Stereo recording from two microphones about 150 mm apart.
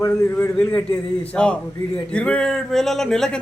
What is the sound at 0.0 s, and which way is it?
Speech, 20° left (ahead or behind).